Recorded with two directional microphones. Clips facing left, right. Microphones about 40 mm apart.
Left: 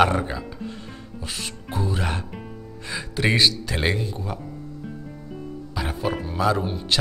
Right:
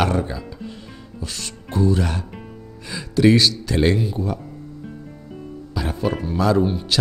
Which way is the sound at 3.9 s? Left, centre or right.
Centre.